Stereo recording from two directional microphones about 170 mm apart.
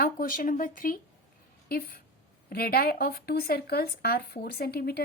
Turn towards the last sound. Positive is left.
turn(degrees=65)  # may be behind; listen again after turning